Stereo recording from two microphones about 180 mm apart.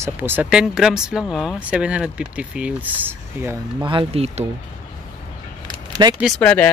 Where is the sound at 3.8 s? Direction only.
30° right (ahead or behind).